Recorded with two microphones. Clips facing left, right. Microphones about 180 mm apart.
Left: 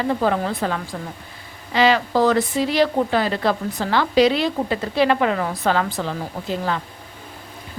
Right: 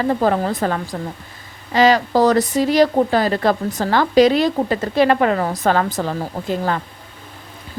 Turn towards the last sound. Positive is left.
turn(degrees=-50)  # may be behind; listen again after turning